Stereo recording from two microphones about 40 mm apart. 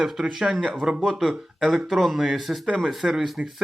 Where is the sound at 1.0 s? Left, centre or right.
Centre.